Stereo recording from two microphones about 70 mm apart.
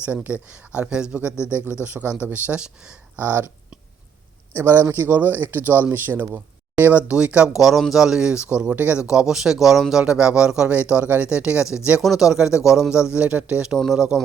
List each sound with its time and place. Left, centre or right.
0.3 s speech: centre
3.2 s speech: right
4.6 s speech: right
9.0 s speech: centre
12.5 s a man's voice: left
12.7 s speech: centre
13.7 s speech: centre